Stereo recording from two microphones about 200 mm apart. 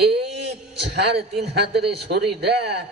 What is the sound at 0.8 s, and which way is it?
A man's voice, 55° right (ahead or behind).